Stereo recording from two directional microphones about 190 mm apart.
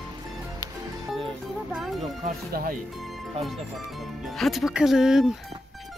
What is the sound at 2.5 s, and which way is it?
Speech, 50° right (ahead or behind).